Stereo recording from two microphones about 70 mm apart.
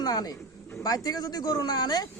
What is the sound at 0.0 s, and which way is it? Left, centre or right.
Speech, left.